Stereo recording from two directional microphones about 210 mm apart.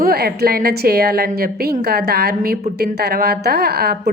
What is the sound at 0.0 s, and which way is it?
A woman's voice, 45° right (ahead or behind).